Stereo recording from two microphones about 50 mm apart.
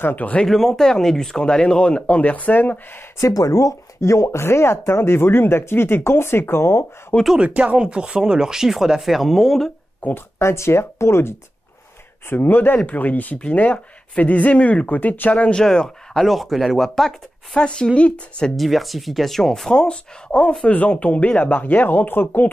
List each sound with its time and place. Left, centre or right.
0.0 s speech: left
0.5 s speech: centre; by 3.0 s left
4.0 s speech: left
7.3 s speech: right; by 9.7 s centre
10.0 s speech: left
10.4 s speech: left
12.3 s speech: left
12.7 s speech: left
15.6 s speech: centre
16.3 s speech: centre
17.6 s speech: centre
18.6 s speech: centre; by 22.5 s left